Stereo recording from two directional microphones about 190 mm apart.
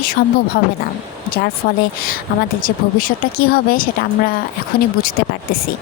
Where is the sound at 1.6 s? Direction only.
50° left (ahead or behind).